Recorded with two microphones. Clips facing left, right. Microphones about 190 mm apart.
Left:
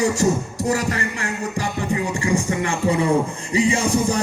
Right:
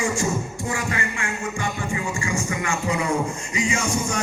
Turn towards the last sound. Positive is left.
turn(degrees=35)  # may be behind; listen again after turning